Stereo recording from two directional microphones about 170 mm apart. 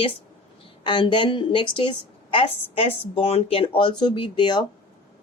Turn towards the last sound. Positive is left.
turn(degrees=25)  # may be behind; listen again after turning